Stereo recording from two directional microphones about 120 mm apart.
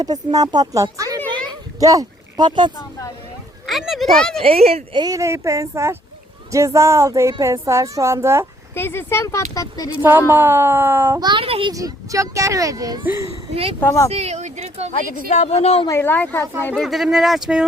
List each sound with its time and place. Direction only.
0.0 s speech: 35° right (ahead or behind)
1.3 s a sound: 35° right (ahead or behind)
3.7 s speech: centre (ahead or behind)
4.4 s speech: 55° right (ahead or behind)
4.9 s speech: 30° right (ahead or behind)
8.7 s speech: 20° left (ahead or behind)
10.0 s speech: 20° right (ahead or behind)
11.2 s a child's voice: 40° right (ahead or behind)
11.7 s speech: 30° right (ahead or behind)
13.7 s speech: 20° left (ahead or behind)
14.1 s speech: 65° right (ahead or behind)
15.3 s speech: 65° left (ahead or behind)
15.9 s speech: 20° left (ahead or behind)
16.7 s speech: centre (ahead or behind)